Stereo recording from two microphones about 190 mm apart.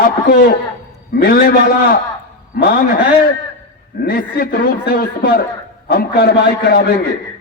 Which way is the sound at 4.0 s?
50° left (ahead or behind).